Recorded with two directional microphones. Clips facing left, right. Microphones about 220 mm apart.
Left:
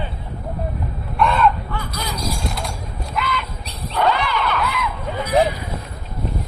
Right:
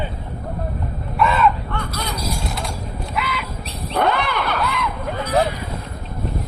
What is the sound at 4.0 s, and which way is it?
Vehicle, 55° right (ahead or behind).